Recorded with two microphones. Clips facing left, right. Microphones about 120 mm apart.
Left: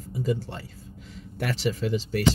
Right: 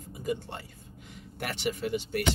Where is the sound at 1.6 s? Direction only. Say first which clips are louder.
Left 2 dB; 90° left.